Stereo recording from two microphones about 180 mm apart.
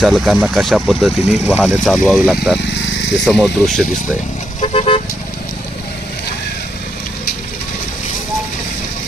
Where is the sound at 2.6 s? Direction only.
90° left.